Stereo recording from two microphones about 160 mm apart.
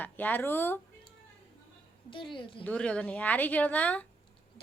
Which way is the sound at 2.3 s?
30° left (ahead or behind).